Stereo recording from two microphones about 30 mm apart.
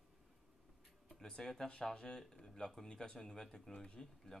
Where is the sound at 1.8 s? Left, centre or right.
Left.